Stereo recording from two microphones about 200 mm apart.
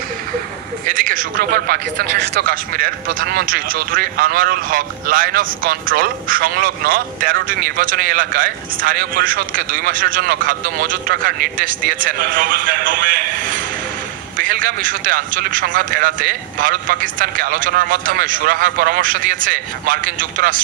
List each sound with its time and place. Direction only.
0.8 s a man's voice: 45° right (ahead or behind)